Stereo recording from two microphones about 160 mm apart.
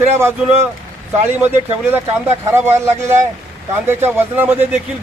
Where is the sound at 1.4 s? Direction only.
15° right (ahead or behind).